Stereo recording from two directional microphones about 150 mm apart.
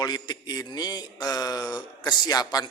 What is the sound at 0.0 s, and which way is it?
A man's voice, 30° left (ahead or behind).